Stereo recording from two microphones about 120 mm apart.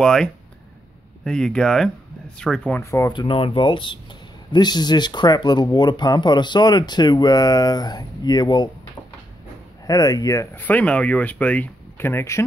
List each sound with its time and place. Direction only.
0.0 s speech: 5° left (ahead or behind)
2.8 s speech: 25° left (ahead or behind)
3.1 s speech: 45° left (ahead or behind)
9.8 s speech: 30° left (ahead or behind)